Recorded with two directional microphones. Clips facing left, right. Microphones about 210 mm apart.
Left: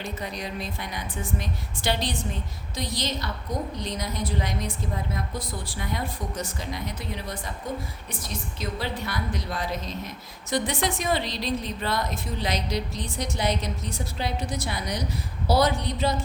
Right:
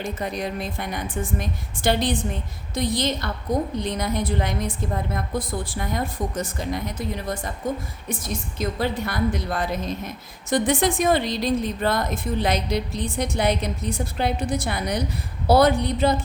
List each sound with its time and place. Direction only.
0.0 s a woman's voice: 50° right (ahead or behind)